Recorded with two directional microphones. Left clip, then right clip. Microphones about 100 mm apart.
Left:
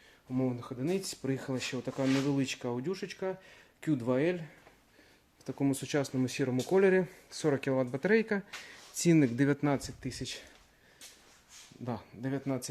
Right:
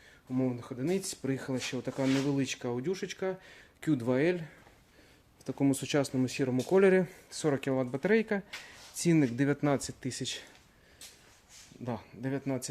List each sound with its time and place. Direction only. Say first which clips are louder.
0.3 s speech: right 1 dB; 15° right (ahead or behind); by 4.4 s 40° right (ahead or behind)
5.5 s speech: right 2 dB; 45° right (ahead or behind)
6.2 s speech: right 1 dB; 25° right (ahead or behind)
6.7 s speech: right 2 dB; 45° right (ahead or behind)
7.3 s speech: even; 15° right (ahead or behind)
9.0 s speech: left 1 dB; 5° right (ahead or behind)
9.7 s speech: right 2 dB; 50° right (ahead or behind)
11.9 s speech: right 1 dB; 20° right (ahead or behind)